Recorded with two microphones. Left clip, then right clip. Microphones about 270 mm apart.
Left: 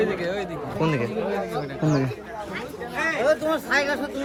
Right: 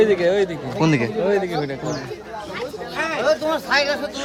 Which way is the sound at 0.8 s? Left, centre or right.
Centre.